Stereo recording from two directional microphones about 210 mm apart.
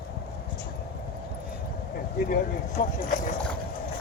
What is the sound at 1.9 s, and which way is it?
Speech, 45° left (ahead or behind).